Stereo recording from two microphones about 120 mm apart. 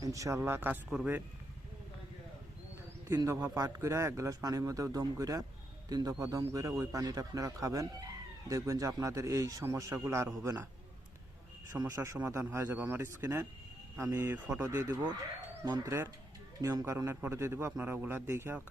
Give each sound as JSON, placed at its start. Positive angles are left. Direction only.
{"t": 0.0, "sound": "speech", "side_deg": -25}
{"t": 0.9, "sound": "a man's voice", "side_deg": -5}
{"t": 3.2, "sound": "speech", "side_deg": -25}
{"t": 11.7, "sound": "speech", "side_deg": -25}
{"t": 14.3, "sound": "speech", "side_deg": -10}
{"t": 14.6, "sound": "speech", "side_deg": -25}
{"t": 14.9, "sound": "speech", "side_deg": -35}
{"t": 15.8, "sound": "speech", "side_deg": -20}